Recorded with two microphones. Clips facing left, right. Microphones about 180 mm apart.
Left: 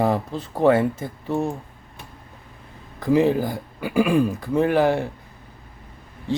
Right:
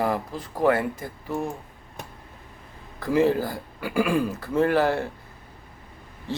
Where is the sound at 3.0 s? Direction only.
15° left (ahead or behind).